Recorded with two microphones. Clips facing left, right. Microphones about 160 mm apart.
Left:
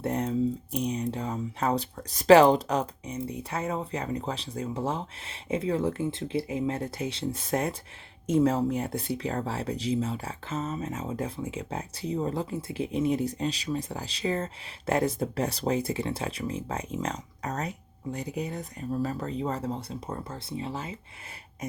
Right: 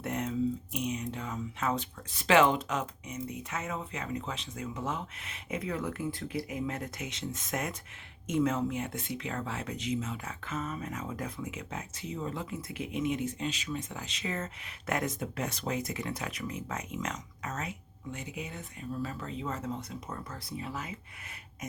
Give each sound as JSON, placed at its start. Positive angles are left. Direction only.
{"t": 0.0, "sound": "speech", "side_deg": 35}